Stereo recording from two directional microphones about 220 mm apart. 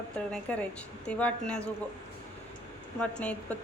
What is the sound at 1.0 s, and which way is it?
Speech, 5° left (ahead or behind).